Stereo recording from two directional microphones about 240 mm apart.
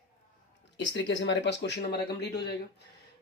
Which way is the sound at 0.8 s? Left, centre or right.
Left.